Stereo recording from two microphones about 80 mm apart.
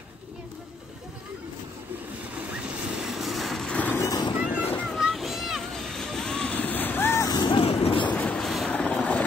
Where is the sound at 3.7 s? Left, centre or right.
Centre.